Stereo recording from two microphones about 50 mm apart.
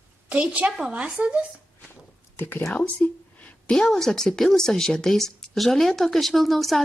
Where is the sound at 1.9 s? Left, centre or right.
Left.